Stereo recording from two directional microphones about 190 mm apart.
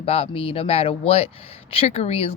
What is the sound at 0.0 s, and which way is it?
Speech, 30° left (ahead or behind).